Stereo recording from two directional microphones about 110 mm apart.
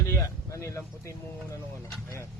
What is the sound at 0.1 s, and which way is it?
Speech, 25° left (ahead or behind).